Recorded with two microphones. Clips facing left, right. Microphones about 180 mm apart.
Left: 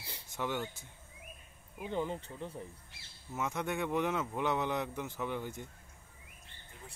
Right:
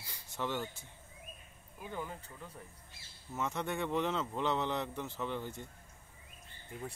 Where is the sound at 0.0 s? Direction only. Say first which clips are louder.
Left 3 dB; 25° left (ahead or behind).